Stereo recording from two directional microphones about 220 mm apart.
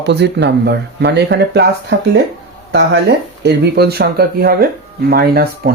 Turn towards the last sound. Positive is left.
turn(degrees=-45)  # may be behind; listen again after turning